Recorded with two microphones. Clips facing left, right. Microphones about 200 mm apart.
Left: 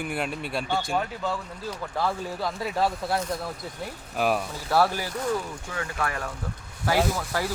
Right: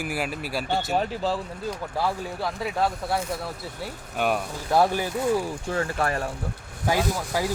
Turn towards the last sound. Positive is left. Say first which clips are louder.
# even
turn(degrees=-15)  # may be behind; listen again after turning